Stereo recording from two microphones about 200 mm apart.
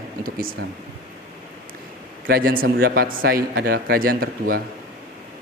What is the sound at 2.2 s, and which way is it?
Speech, 50° right (ahead or behind).